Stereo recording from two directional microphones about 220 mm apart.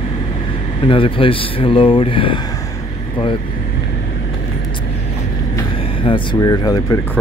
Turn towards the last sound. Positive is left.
turn(degrees=15)  # may be behind; listen again after turning